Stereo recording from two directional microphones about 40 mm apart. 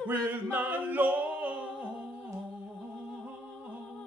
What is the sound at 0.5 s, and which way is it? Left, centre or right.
A capella, right.